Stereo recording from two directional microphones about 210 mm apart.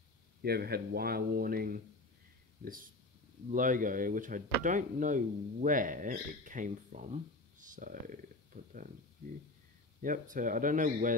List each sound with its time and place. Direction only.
0.4 s speech: 50° right (ahead or behind)
10.0 s speech: 40° right (ahead or behind)